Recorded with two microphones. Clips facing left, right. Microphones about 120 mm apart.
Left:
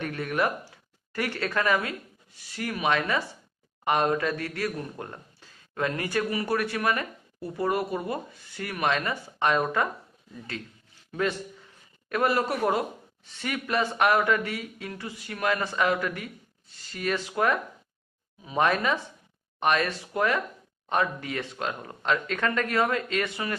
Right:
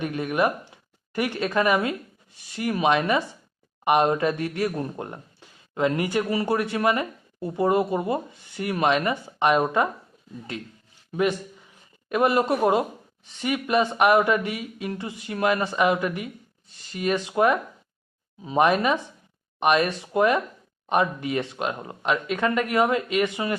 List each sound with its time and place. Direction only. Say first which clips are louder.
0.0 s speech: right 4 dB; 15° right (ahead or behind)
11.1 s speech: right 4 dB; 15° right (ahead or behind)